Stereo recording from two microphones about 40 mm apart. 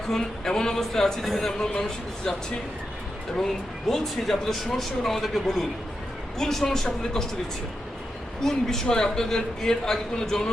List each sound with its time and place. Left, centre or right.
0.1 s a man's voice: centre
3.3 s a man's voice: centre
8.4 s a man's voice: centre